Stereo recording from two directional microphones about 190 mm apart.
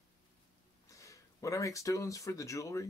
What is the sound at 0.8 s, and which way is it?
Speech, 15° left (ahead or behind).